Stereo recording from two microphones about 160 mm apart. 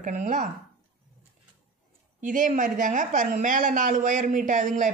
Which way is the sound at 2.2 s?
55° right (ahead or behind).